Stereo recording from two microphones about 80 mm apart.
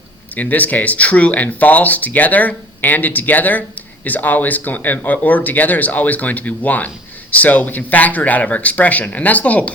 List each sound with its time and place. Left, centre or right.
0.3 s speech: left